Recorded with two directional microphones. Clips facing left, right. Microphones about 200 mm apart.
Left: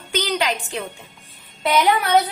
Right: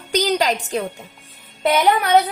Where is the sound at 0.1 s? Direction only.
40° right (ahead or behind).